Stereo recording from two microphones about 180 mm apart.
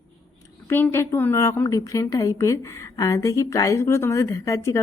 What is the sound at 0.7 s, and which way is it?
A woman's voice, 10° left (ahead or behind).